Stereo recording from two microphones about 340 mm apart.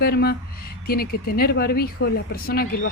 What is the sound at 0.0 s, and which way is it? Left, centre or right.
Speech, left.